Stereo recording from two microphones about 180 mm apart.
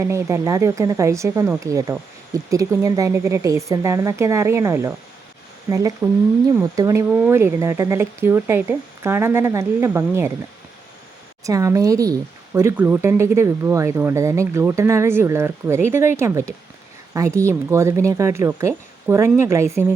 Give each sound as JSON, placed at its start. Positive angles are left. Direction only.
{"t": 0.0, "sound": "speech", "side_deg": -15}
{"t": 11.4, "sound": "speech", "side_deg": -20}